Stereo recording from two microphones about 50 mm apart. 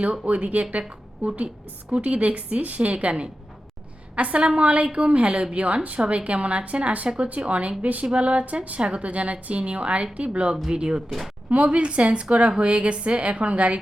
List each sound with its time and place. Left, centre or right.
0.0 s a woman's voice: centre
0.3 s a woman's voice: right